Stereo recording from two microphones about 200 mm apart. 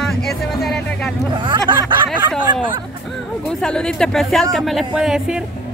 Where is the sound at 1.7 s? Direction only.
25° right (ahead or behind).